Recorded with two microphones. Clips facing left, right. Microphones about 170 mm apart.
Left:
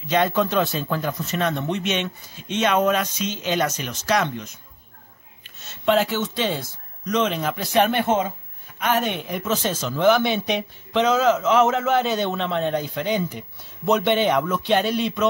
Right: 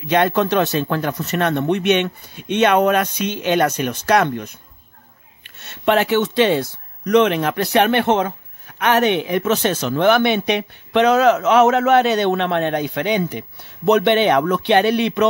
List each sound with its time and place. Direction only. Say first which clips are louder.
0.0 s speech: right 4 dB; 65° right (ahead or behind)
5.6 s speech: right 3 dB; 65° right (ahead or behind)